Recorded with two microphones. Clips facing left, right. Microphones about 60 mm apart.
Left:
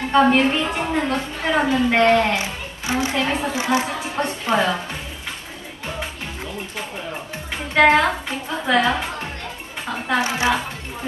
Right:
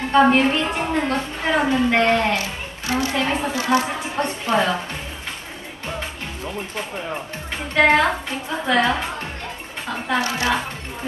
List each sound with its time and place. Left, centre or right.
0.2 s a woman's voice: centre
2.3 s speech: left
3.2 s a woman's voice: centre
3.5 s a woman's voice: left
4.1 s a woman's voice: centre
7.7 s a woman's voice: centre
10.2 s a woman's voice: left